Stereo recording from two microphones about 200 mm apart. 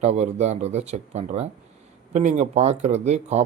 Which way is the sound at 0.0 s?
35° right (ahead or behind).